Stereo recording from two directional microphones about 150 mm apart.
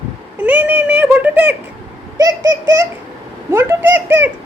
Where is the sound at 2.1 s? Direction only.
25° right (ahead or behind).